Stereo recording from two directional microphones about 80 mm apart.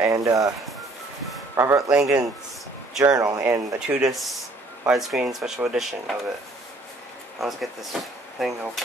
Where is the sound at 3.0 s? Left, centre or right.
Right.